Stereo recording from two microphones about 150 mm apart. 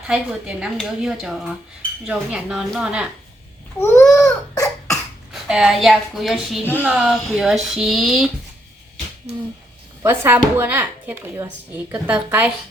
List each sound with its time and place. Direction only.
0.1 s a woman's voice: 5° right (ahead or behind)
4.1 s cough: 20° left (ahead or behind)
5.3 s a woman's voice: 5° right (ahead or behind)
9.3 s a sound: 40° right (ahead or behind)
10.0 s speech: 15° right (ahead or behind)